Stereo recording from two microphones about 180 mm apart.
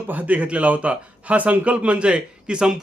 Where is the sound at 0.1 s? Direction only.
10° right (ahead or behind).